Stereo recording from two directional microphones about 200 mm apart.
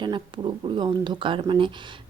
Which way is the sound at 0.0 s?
25° right (ahead or behind).